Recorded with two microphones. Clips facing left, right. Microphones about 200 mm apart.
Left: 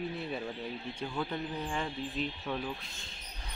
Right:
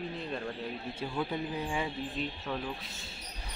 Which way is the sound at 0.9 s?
5° right (ahead or behind).